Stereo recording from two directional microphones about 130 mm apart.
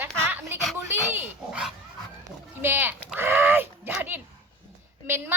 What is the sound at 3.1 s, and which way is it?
Dog, 15° right (ahead or behind).